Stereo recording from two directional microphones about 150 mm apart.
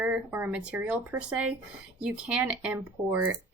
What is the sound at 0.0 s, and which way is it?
Speech, 10° right (ahead or behind).